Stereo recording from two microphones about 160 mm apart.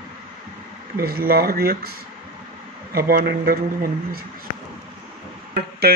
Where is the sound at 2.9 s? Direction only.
70° right (ahead or behind).